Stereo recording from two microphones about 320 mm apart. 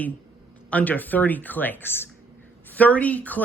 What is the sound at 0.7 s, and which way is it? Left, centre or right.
Speech, centre.